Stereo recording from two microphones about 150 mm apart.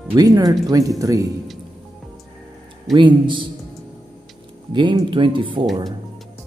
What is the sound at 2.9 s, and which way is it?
Speech, 30° right (ahead or behind).